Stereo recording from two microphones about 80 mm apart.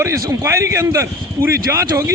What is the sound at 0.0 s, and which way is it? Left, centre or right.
A man's voice, right.